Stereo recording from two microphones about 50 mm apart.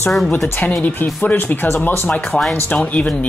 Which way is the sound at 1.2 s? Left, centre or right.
Left.